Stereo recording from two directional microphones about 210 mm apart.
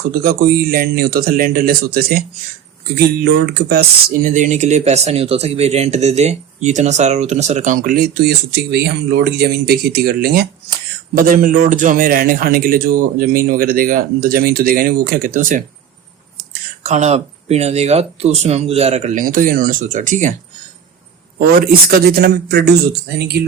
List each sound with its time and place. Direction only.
0.1 s speech: 45° right (ahead or behind)
21.3 s speech: 45° right (ahead or behind)